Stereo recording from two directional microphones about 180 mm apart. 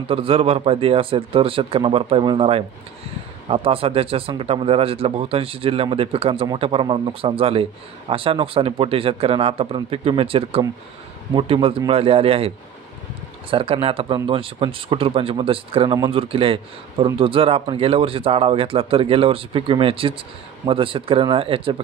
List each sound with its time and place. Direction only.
0.1 s speech: 30° right (ahead or behind)